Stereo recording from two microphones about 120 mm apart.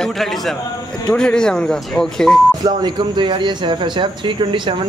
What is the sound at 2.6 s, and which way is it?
Speech, 35° right (ahead or behind).